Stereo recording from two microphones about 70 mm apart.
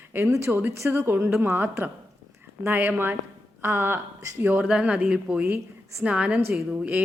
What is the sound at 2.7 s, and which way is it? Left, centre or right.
Speech, right.